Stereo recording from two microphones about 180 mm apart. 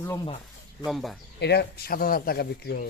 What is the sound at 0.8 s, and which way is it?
Speech, centre (ahead or behind).